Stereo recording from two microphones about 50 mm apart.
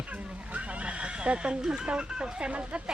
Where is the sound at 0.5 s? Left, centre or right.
Right.